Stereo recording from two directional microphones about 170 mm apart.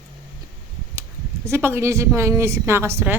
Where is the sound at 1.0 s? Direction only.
15° right (ahead or behind).